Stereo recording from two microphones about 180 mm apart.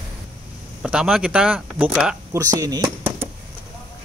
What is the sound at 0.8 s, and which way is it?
Speech, 5° right (ahead or behind).